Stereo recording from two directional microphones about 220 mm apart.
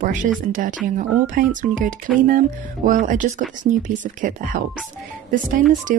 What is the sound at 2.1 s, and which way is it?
Speech, centre (ahead or behind).